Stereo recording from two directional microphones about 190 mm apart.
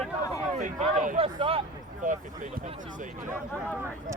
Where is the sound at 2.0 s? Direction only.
40° right (ahead or behind).